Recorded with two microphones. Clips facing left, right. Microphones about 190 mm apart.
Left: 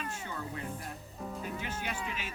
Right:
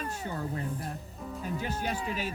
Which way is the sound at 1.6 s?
40° right (ahead or behind).